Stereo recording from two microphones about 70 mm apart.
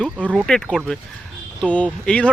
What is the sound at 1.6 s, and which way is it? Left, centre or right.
Speech, centre.